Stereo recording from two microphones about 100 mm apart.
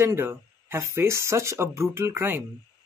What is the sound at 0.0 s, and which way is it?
Speech, 25° right (ahead or behind).